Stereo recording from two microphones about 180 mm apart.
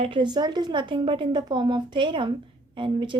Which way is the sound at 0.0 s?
25° right (ahead or behind).